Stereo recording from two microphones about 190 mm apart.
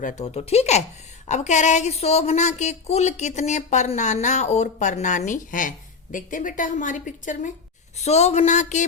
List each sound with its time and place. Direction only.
0.0 s speech: 40° left (ahead or behind)